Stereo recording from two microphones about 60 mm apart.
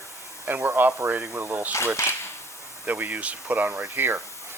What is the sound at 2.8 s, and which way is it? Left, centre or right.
Speech, right.